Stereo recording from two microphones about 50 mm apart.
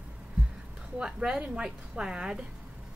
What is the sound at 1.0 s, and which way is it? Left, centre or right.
Speech, centre.